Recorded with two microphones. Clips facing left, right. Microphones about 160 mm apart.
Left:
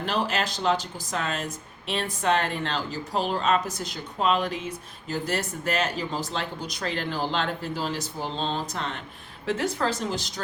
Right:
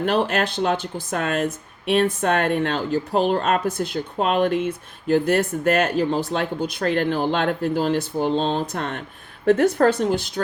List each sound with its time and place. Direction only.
0.0 s speech: 55° right (ahead or behind)